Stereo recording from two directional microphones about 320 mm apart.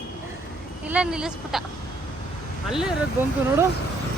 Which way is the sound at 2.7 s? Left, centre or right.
Centre.